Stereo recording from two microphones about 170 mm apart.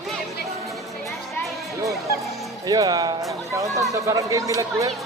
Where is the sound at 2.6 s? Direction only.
25° right (ahead or behind).